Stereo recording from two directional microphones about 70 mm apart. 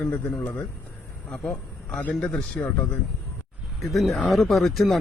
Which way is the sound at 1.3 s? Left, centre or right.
Centre.